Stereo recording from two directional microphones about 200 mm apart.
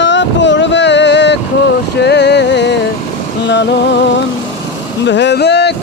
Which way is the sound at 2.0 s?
55° left (ahead or behind).